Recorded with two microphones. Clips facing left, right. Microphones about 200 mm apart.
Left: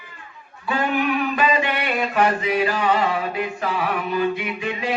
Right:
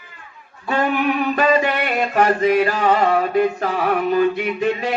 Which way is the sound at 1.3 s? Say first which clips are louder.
Right 4 dB; 45° right (ahead or behind).